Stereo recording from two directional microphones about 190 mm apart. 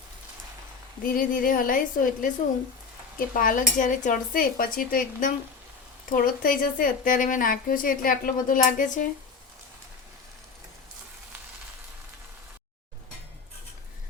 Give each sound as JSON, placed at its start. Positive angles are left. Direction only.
{"t": 1.0, "sound": "a woman's voice", "side_deg": 45}